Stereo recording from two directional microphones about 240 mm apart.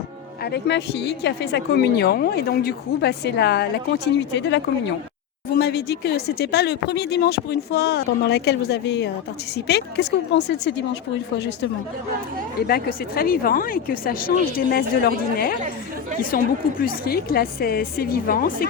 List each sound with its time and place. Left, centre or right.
0.5 s a woman's voice: left
12.5 s a woman's voice: left